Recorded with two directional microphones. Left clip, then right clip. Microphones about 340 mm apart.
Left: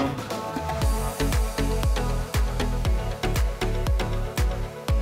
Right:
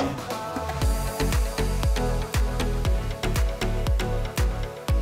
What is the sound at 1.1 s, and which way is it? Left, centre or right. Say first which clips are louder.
Music: even; centre.